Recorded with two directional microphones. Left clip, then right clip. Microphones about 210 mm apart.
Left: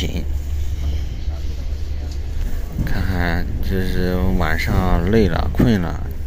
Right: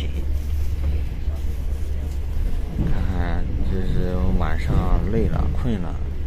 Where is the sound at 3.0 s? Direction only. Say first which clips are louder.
Left 7 dB; 20° left (ahead or behind).